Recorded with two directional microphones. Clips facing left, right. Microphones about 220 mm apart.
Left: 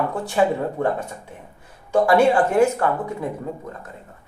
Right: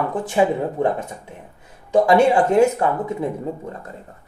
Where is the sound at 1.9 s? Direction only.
20° right (ahead or behind).